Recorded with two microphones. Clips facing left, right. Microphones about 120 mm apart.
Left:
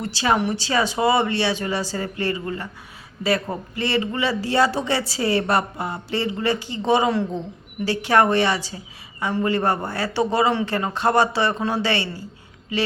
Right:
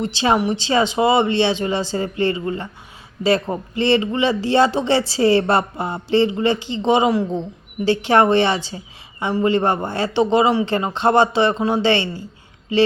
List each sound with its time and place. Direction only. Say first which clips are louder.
0.0 s a man's voice: right 3 dB; 20° right (ahead or behind)